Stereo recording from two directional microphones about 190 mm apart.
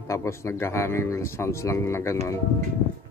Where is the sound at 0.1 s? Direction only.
15° left (ahead or behind).